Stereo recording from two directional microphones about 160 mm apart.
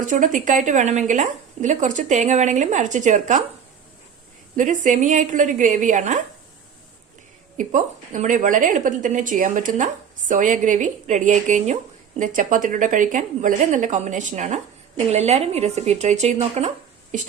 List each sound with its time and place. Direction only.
0.0 s a woman's voice: 55° right (ahead or behind)
4.5 s a woman's voice: 55° right (ahead or behind)
7.5 s a woman's voice: 50° right (ahead or behind)